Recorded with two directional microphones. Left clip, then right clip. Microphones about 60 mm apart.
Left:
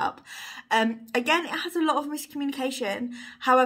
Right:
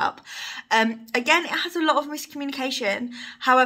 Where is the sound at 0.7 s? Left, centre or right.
Left.